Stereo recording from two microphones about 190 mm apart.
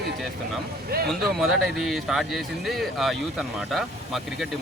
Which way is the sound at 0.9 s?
55° right (ahead or behind).